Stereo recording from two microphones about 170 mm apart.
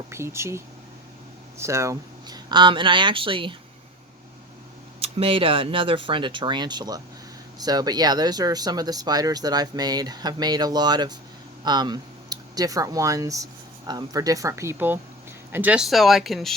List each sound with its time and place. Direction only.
0.1 s speech: 15° right (ahead or behind)
4.9 s speech: 35° right (ahead or behind); by 16.6 s centre (ahead or behind)